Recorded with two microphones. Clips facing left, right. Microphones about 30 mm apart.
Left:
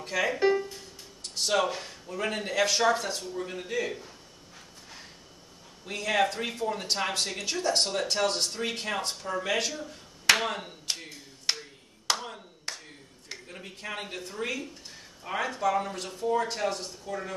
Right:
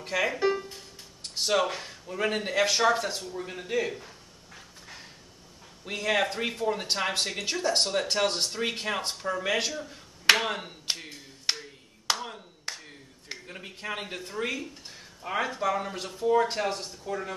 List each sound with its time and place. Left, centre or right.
0.1 s speech: centre
0.4 s music: centre
1.3 s speech: centre
5.9 s speech: centre
10.9 s a sound: centre
12.1 s clapping: centre
15.2 s speech: centre